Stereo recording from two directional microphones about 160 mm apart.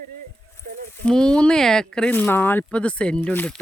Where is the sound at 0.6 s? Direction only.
60° right (ahead or behind).